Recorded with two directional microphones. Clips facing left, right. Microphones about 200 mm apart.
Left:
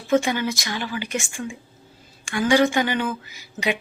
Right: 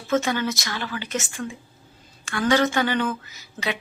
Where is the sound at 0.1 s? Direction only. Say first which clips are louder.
Left 2 dB; 15° left (ahead or behind).